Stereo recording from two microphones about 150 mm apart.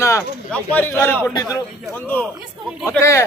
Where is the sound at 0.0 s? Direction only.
20° left (ahead or behind).